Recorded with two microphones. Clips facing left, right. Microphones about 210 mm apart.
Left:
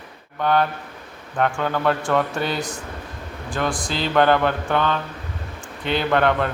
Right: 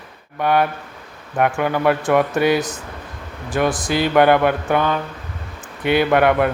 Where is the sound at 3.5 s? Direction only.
20° right (ahead or behind).